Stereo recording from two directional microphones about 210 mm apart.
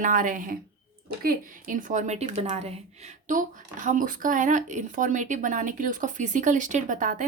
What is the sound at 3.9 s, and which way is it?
Speech, 40° right (ahead or behind).